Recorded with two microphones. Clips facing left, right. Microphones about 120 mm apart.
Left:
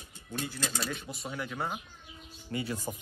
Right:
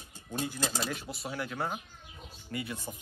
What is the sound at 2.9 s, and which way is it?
Speech, 45° left (ahead or behind).